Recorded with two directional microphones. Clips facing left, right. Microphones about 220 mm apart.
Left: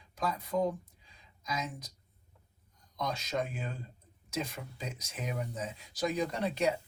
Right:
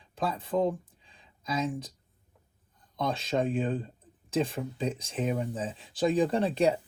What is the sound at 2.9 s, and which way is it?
Speech, 30° right (ahead or behind).